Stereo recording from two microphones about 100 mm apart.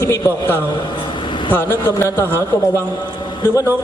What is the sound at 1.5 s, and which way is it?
Speech, 25° left (ahead or behind).